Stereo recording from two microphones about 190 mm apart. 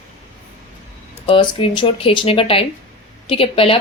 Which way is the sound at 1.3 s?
25° left (ahead or behind).